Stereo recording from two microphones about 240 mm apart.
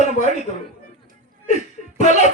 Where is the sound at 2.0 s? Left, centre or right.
Left.